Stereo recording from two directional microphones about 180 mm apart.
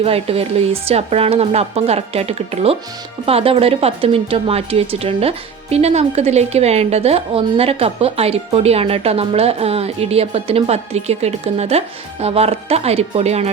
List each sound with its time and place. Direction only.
0.0 s a woman's voice: 35° right (ahead or behind)